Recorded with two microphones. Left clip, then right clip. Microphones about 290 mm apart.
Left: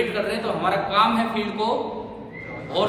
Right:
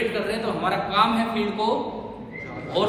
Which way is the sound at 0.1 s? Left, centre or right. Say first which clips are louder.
Left 1 dB; centre.